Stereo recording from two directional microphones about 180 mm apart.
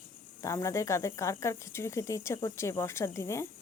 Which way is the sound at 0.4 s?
15° left (ahead or behind).